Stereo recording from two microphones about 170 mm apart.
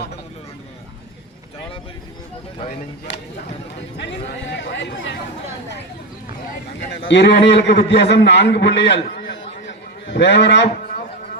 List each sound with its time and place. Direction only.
3.1 s a man's voice: 90° left
7.1 s a man's voice: 85° left
9.0 s a sound: 80° left